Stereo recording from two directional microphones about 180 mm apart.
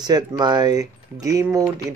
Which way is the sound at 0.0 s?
20° right (ahead or behind).